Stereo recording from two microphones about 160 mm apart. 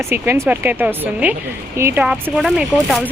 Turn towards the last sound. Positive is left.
turn(degrees=0)  # may be behind; listen again after turning